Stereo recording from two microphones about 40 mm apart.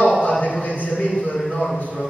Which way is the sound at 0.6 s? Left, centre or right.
Left.